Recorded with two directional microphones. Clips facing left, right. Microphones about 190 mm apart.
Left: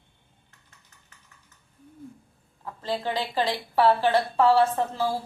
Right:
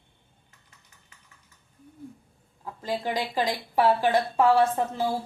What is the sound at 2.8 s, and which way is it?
A woman's voice, 10° right (ahead or behind).